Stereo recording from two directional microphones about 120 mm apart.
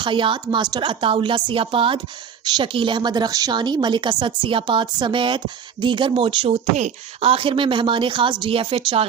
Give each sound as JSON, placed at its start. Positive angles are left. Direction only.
{"t": 0.0, "sound": "a woman's voice", "side_deg": -45}
{"t": 2.4, "sound": "a woman's voice", "side_deg": -35}